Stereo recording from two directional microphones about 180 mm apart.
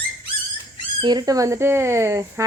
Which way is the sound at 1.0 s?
25° right (ahead or behind).